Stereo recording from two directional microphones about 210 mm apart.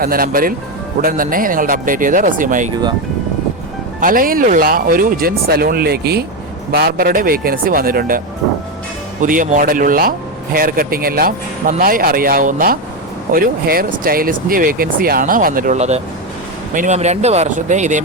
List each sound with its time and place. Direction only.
0.0 s speech: 45° right (ahead or behind)
4.0 s speech: 40° right (ahead or behind)
9.2 s speech: 40° right (ahead or behind)